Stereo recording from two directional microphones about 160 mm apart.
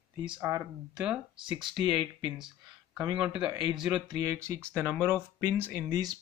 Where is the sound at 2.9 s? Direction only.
5° right (ahead or behind).